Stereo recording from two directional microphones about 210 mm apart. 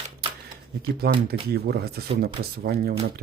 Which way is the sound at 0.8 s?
50° right (ahead or behind).